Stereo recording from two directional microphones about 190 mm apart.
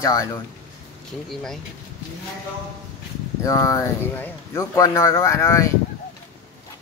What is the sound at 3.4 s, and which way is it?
Speech, 15° left (ahead or behind).